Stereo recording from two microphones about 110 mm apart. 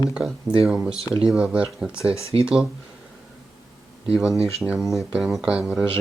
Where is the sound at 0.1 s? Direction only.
5° right (ahead or behind).